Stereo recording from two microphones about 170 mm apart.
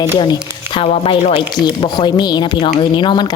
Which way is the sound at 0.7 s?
35° left (ahead or behind).